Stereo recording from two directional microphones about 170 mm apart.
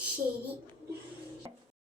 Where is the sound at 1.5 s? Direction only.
25° right (ahead or behind).